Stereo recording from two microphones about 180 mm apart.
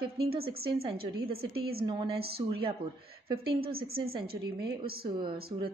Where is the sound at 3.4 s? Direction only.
55° right (ahead or behind).